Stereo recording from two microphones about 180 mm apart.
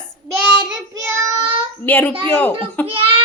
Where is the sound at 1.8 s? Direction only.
10° left (ahead or behind).